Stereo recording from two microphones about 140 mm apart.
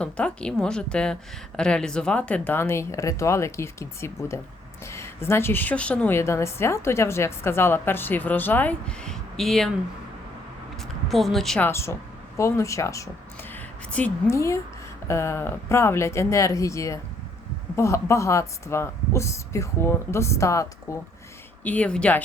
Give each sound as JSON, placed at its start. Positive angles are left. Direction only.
{"t": 0.0, "sound": "a woman's voice", "side_deg": 5}
{"t": 10.8, "sound": "speech", "side_deg": 0}
{"t": 11.6, "sound": "speech", "side_deg": 20}
{"t": 13.5, "sound": "a sound", "side_deg": 10}
{"t": 14.3, "sound": "speech", "side_deg": 20}
{"t": 21.6, "sound": "a woman's voice", "side_deg": 10}